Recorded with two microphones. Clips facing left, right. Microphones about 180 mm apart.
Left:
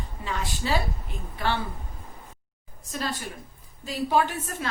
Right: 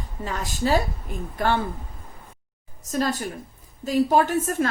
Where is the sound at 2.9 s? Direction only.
45° right (ahead or behind).